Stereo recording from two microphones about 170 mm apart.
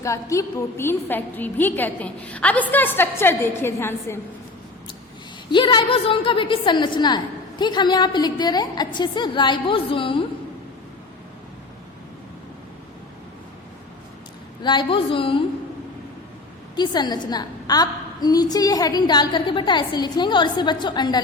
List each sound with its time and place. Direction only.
0.0 s a woman's voice: 20° left (ahead or behind)
5.5 s a woman's voice: 25° left (ahead or behind)
14.6 s a woman's voice: 25° left (ahead or behind)
16.7 s a woman's voice: 25° left (ahead or behind)